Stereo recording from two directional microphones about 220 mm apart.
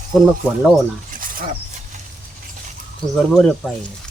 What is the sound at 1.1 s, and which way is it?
Wild animals, 40° right (ahead or behind).